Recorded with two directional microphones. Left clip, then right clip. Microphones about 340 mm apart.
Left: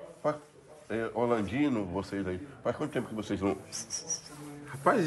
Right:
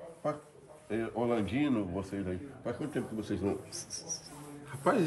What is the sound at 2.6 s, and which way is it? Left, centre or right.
Speech, centre.